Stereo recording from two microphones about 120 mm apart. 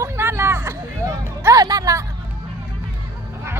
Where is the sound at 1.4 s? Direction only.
30° right (ahead or behind).